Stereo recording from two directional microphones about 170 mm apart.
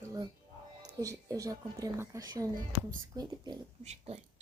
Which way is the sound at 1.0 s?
20° right (ahead or behind).